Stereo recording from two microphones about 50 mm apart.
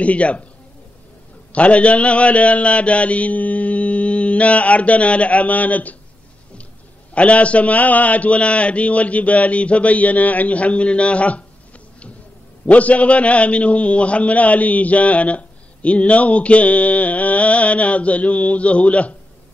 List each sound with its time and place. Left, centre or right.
0.0 s a man's voice: left
1.5 s a man's voice: left
7.2 s a man's voice: left
12.6 s a man's voice: left